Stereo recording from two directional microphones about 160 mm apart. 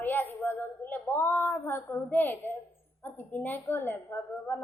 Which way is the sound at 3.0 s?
10° left (ahead or behind).